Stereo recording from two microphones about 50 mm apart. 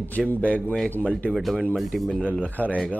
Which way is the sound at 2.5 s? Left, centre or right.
Left.